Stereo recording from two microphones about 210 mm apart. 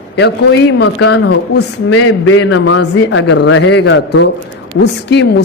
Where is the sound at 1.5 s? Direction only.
65° left (ahead or behind).